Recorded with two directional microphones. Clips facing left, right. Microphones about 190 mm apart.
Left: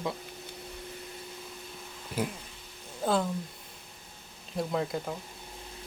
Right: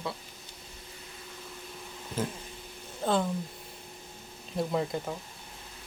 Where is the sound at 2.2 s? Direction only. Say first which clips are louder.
Left 1 dB; 10° left (ahead or behind).